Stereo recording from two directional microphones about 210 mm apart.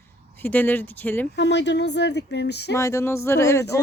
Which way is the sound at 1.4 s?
55° left (ahead or behind).